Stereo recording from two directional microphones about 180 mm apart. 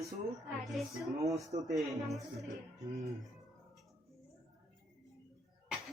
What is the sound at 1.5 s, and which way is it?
Speech, 40° right (ahead or behind).